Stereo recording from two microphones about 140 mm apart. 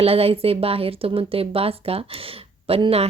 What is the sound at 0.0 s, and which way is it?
A woman's voice, 45° right (ahead or behind).